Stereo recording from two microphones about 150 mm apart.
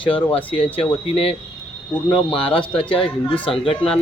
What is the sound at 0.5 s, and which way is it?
A man's voice, 40° left (ahead or behind).